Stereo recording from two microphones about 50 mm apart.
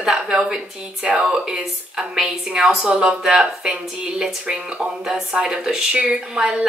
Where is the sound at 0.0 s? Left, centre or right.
Centre.